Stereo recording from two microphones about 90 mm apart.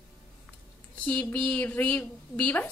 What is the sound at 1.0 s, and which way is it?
A woman's voice, 15° left (ahead or behind).